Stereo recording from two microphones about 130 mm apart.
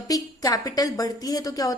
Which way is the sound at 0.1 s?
30° left (ahead or behind).